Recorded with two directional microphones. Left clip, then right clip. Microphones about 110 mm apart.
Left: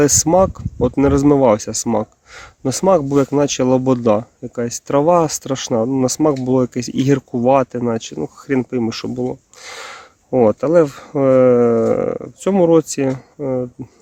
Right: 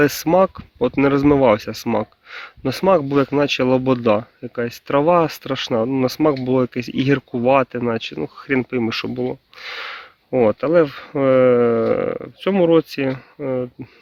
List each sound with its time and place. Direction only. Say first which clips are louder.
0.0 s speech: left 2 dB; 30° left (ahead or behind)
5.7 s speech: left 2 dB; 20° left (ahead or behind)
6.1 s speech: left 2 dB; 30° left (ahead or behind)
9.6 s a sound: right 2 dB; 35° left (ahead or behind)
10.6 s speech: left 2 dB; 35° left (ahead or behind)
12.4 s speech: left 2 dB; 35° left (ahead or behind)
13.1 s speech: left 2 dB; 20° left (ahead or behind)